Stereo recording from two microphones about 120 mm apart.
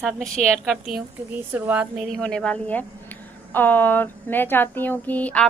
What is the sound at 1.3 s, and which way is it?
Speech, 15° right (ahead or behind).